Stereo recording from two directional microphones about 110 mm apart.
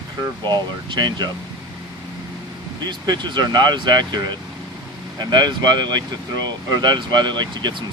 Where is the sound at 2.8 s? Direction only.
40° right (ahead or behind).